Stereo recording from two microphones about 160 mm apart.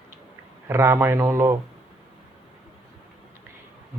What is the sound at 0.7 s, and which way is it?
Speech, 15° right (ahead or behind).